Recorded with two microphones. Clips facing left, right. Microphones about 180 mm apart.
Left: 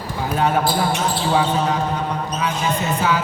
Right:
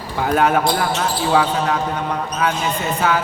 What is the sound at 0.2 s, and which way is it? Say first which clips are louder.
Speech: right 4 dB; 75° right (ahead or behind).